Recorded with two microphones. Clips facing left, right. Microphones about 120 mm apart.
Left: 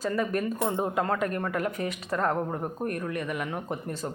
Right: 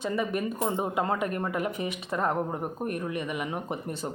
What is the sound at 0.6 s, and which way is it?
A woman's voice, 20° right (ahead or behind).